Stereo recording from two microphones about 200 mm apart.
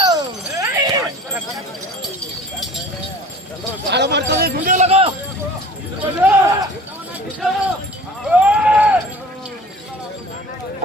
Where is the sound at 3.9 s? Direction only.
60° right (ahead or behind).